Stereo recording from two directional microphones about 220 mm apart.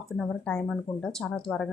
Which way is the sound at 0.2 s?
5° left (ahead or behind).